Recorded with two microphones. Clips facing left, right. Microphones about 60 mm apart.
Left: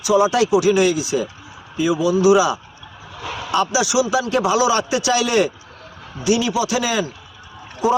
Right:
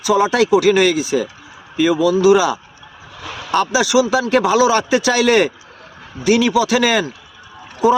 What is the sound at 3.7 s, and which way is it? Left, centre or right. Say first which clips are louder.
Speech: right 6 dB; right.